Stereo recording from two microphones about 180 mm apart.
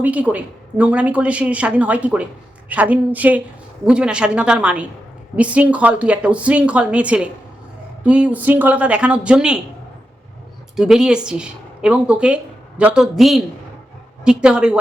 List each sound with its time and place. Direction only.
0.0 s a woman's voice: 10° right (ahead or behind)
10.8 s a woman's voice: 5° right (ahead or behind)